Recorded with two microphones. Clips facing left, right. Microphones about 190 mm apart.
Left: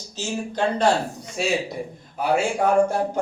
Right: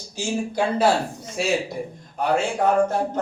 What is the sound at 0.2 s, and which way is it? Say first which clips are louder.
A man's voice: right 1 dB; 10° right (ahead or behind).